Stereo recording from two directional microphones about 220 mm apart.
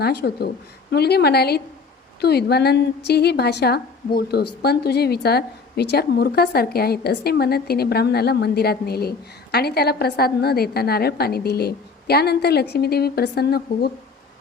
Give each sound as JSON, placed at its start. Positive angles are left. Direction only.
{"t": 0.0, "sound": "a woman's voice", "side_deg": 45}